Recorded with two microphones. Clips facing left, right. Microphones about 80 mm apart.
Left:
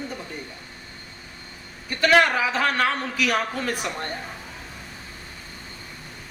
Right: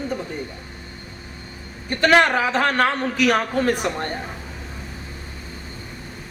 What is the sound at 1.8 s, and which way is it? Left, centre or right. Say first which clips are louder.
Speech: right 2 dB; right.